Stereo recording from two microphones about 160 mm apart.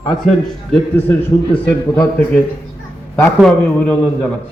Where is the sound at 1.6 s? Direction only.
15° left (ahead or behind).